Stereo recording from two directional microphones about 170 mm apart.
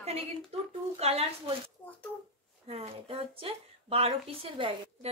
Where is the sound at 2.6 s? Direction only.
35° right (ahead or behind).